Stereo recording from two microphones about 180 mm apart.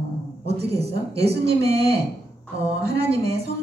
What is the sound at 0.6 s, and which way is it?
Speech, 35° right (ahead or behind).